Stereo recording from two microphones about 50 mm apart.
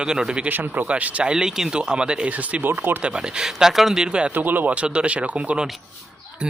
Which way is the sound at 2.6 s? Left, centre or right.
Right.